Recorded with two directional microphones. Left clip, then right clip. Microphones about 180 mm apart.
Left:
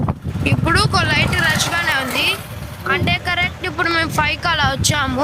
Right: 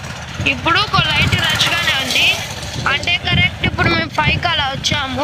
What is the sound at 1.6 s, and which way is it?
Speech, 5° left (ahead or behind).